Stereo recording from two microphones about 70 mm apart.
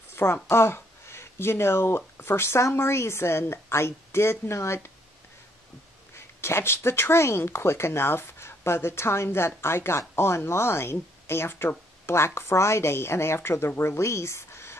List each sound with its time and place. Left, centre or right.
0.1 s speech: left
6.1 s speech: left